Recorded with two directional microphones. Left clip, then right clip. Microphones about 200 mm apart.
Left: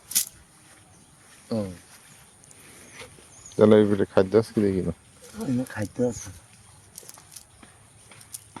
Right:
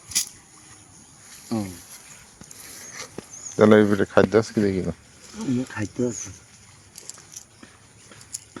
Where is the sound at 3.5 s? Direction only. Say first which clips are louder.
Right 2 dB; 5° left (ahead or behind).